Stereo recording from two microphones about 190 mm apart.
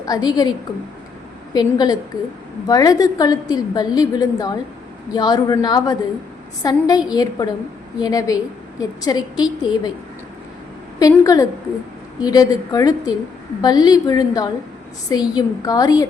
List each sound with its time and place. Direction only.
0.0 s a woman's voice: 20° left (ahead or behind)
1.5 s a woman's voice: 20° left (ahead or behind)
11.0 s a woman's voice: 20° left (ahead or behind)